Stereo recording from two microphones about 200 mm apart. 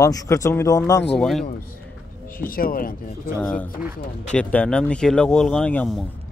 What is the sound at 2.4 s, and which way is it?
Speech, 45° left (ahead or behind).